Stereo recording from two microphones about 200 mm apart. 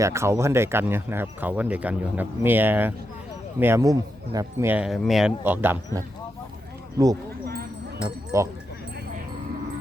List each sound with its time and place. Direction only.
0.0 s speech: 15° right (ahead or behind)
8.0 s speech: 15° right (ahead or behind)